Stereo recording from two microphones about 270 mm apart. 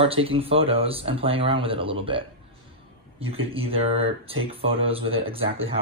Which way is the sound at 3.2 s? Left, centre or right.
Right.